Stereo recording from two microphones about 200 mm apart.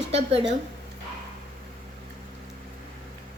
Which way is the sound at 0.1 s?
30° right (ahead or behind).